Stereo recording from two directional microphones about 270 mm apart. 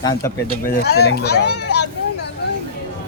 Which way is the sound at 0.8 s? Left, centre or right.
Left.